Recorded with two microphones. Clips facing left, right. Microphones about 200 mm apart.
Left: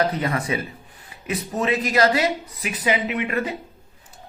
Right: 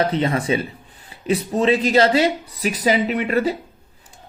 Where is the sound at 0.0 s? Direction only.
25° right (ahead or behind).